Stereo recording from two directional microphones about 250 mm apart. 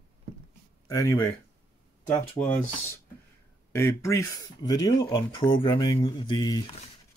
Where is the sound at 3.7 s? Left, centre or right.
Centre.